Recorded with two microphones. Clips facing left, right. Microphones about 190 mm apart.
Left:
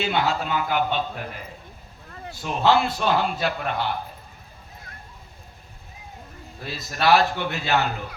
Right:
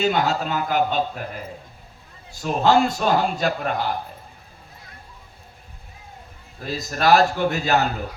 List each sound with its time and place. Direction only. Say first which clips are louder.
0.0 s a man's voice: right 3 dB; 45° right (ahead or behind)
2.4 s a man's voice: right 3 dB; 45° right (ahead or behind)
6.7 s a man's voice: right 2 dB; 45° right (ahead or behind)